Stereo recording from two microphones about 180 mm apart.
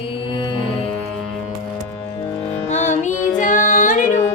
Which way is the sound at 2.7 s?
40° left (ahead or behind).